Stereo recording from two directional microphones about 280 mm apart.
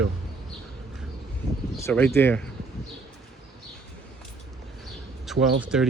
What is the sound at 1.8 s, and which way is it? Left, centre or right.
Speech, centre.